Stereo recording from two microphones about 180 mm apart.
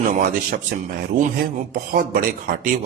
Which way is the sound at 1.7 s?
50° right (ahead or behind).